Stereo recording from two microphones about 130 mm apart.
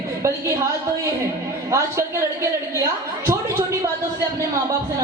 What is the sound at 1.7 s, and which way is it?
A woman's voice, 25° right (ahead or behind).